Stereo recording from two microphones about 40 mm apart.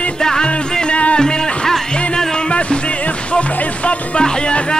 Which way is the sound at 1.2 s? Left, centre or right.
Centre.